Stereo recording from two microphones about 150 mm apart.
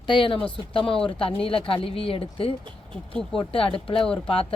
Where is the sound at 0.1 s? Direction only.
35° left (ahead or behind).